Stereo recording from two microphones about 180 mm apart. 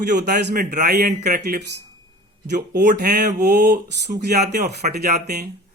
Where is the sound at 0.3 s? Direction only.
65° right (ahead or behind); by 1.6 s 45° right (ahead or behind).